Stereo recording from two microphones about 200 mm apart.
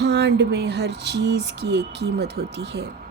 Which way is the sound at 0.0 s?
55° right (ahead or behind).